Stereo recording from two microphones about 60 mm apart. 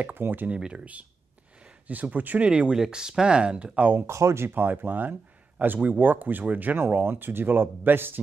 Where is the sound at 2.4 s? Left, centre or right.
Centre.